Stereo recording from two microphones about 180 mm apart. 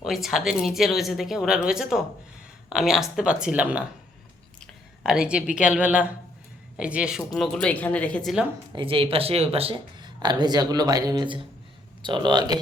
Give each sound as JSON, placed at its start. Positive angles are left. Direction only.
{"t": 0.0, "sound": "a woman's voice", "side_deg": 0}
{"t": 8.7, "sound": "speech", "side_deg": -30}